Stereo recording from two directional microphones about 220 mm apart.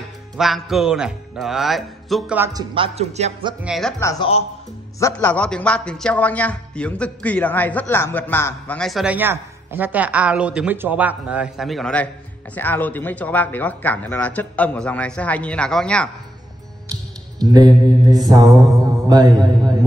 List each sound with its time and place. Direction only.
0.4 s a man's voice: centre (ahead or behind)
2.7 s speech: 25° right (ahead or behind)
3.6 s a man's voice: centre (ahead or behind)
4.0 s a man's voice: 15° left (ahead or behind)
16.9 s music: 15° right (ahead or behind)
18.1 s a man's voice: 20° right (ahead or behind)